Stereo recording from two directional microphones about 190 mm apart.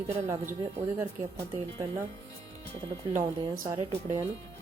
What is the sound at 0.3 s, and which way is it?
Speech, 15° right (ahead or behind).